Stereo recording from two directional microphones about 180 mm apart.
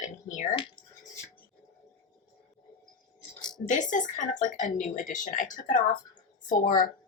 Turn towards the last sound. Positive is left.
turn(degrees=50)  # may be behind; listen again after turning